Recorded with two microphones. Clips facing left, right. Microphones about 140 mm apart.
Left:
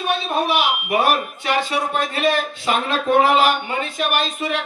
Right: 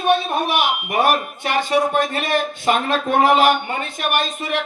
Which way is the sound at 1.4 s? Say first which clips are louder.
Right 3 dB; 50° right (ahead or behind).